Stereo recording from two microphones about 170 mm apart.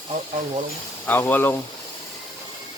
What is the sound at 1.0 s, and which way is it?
Speech, 10° left (ahead or behind).